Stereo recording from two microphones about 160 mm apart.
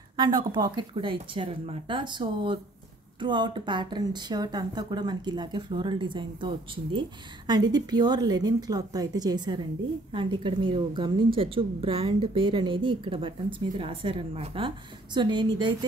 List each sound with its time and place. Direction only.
0.2 s speech: 30° right (ahead or behind)